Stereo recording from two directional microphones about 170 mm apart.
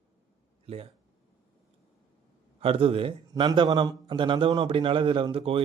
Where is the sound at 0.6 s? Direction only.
35° right (ahead or behind).